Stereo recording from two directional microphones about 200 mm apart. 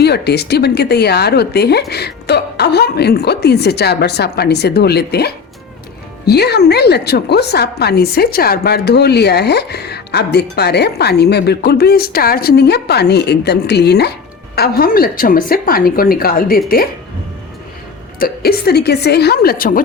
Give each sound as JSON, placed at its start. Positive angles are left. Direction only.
{"t": 0.0, "sound": "a woman's voice", "side_deg": 55}
{"t": 18.2, "sound": "a woman's voice", "side_deg": 50}